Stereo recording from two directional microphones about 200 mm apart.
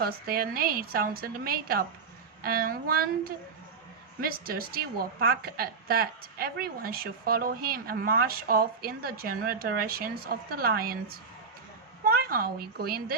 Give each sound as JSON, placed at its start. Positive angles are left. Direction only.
{"t": 0.0, "sound": "a woman's voice", "side_deg": -50}